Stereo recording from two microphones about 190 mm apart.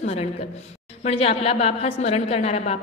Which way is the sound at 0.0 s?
35° left (ahead or behind).